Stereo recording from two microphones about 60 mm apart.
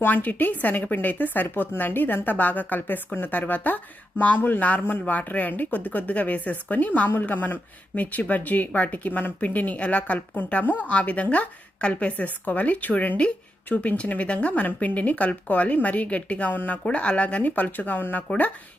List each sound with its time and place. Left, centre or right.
0.0 s a woman's voice: left